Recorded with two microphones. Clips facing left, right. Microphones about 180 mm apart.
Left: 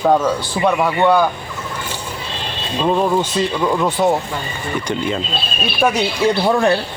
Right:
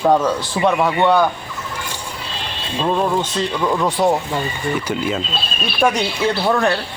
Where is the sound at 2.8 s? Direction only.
10° left (ahead or behind).